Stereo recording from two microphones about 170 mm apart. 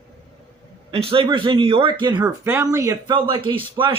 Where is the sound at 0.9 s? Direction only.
35° right (ahead or behind).